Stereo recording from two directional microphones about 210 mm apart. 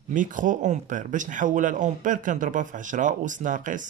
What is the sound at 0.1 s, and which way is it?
Speech, 40° right (ahead or behind).